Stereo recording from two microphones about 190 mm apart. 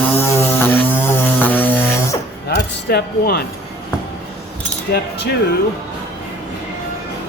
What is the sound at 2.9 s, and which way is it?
Dishes, 55° left (ahead or behind).